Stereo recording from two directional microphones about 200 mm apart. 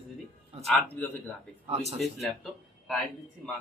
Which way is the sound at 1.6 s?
30° right (ahead or behind).